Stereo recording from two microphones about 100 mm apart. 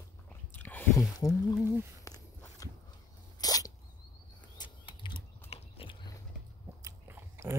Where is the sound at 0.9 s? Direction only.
35° left (ahead or behind).